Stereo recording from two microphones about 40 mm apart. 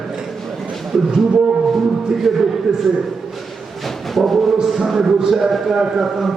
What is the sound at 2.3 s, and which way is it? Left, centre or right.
Speech, centre.